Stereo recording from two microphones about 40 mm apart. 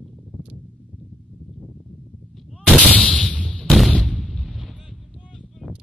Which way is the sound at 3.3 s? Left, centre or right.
Left.